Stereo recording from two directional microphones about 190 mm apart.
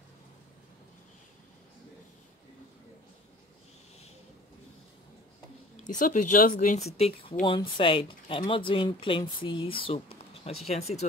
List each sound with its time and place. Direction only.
5.9 s speech: 45° left (ahead or behind)